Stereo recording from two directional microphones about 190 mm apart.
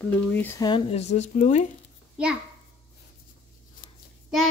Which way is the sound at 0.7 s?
35° left (ahead or behind).